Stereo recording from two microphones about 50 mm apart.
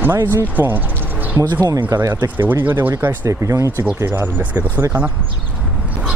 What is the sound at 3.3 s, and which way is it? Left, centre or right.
Speech, right.